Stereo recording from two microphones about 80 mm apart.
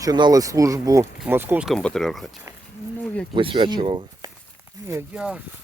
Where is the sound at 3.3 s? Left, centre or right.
Right.